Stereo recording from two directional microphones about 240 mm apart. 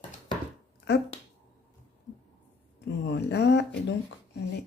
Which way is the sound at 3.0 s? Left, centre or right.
Left.